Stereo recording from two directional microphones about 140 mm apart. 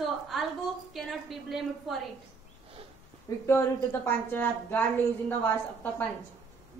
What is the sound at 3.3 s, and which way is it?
A woman's voice, 25° left (ahead or behind).